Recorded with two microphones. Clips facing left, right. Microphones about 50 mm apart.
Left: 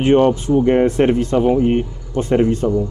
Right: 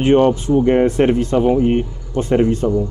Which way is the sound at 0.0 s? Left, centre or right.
Right.